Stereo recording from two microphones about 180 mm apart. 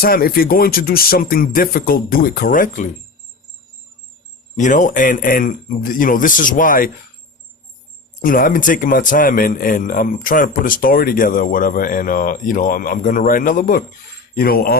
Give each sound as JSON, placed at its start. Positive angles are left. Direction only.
{"t": 0.0, "sound": "a man's voice", "side_deg": 55}
{"t": 4.5, "sound": "a man's voice", "side_deg": 45}
{"t": 8.2, "sound": "a man's voice", "side_deg": 50}